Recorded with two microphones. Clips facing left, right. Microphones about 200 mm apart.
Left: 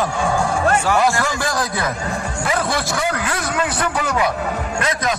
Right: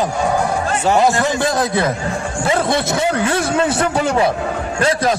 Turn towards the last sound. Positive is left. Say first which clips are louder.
# right 5 dB
turn(degrees=-30)  # may be behind; listen again after turning